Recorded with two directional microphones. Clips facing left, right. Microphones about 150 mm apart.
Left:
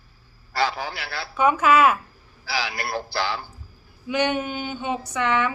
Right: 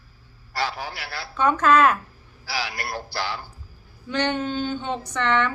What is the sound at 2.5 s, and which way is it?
Speech, 90° left.